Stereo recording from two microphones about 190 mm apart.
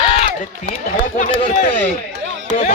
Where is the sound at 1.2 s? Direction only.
40° left (ahead or behind).